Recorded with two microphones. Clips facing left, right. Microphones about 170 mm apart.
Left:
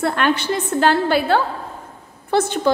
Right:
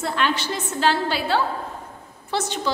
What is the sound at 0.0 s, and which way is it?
A woman's voice, 55° left (ahead or behind).